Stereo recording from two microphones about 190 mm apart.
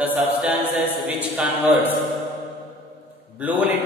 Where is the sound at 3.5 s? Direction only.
10° right (ahead or behind).